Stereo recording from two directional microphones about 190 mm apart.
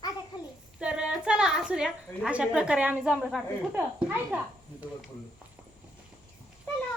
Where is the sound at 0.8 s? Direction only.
5° right (ahead or behind).